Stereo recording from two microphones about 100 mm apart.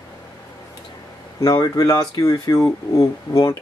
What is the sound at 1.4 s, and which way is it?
Speech, 40° left (ahead or behind).